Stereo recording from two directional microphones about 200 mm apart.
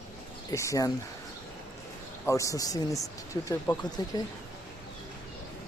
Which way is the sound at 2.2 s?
15° left (ahead or behind).